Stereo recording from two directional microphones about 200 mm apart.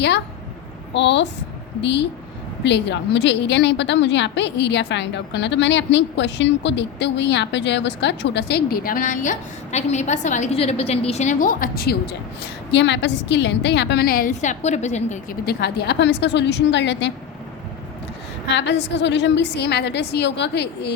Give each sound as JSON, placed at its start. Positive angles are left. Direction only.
{"t": 0.9, "sound": "a woman's voice", "side_deg": 60}
{"t": 12.7, "sound": "a woman's voice", "side_deg": 60}
{"t": 15.4, "sound": "a woman's voice", "side_deg": 55}
{"t": 18.5, "sound": "a woman's voice", "side_deg": 60}